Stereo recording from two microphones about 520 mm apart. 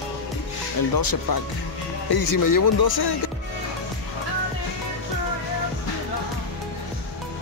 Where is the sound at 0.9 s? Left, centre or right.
Left.